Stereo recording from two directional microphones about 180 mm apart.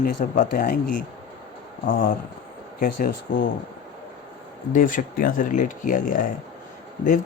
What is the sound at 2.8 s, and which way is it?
Speech, 50° left (ahead or behind).